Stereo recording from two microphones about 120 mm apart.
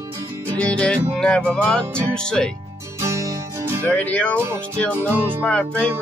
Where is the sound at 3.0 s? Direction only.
25° right (ahead or behind).